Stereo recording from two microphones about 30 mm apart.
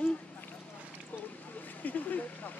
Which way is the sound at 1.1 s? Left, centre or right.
Left.